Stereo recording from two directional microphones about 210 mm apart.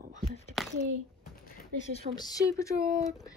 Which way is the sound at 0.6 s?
Centre (ahead or behind).